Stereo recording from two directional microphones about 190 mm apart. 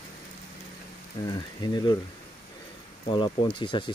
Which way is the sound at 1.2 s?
20° left (ahead or behind).